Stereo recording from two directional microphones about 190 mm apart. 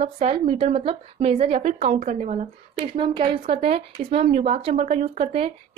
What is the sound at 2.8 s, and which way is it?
A woman's voice, 25° right (ahead or behind).